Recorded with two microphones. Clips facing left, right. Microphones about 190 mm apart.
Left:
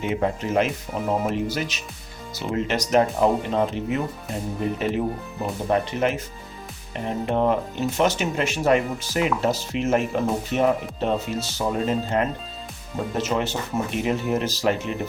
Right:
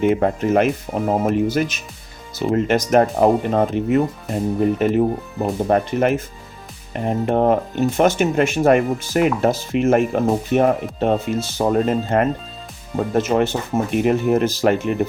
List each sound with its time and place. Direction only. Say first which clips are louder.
0.0 s speech: right 7 dB; 50° right (ahead or behind)